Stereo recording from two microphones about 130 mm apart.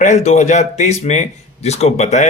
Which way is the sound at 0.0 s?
60° left (ahead or behind).